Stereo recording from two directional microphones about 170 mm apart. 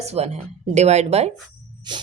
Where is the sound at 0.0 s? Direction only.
40° right (ahead or behind).